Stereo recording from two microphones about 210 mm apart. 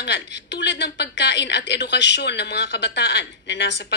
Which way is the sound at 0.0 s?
55° left (ahead or behind).